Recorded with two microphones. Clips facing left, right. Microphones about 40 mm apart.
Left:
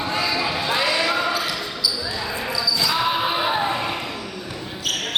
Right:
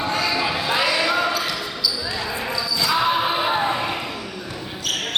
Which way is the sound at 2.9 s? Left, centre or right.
Centre.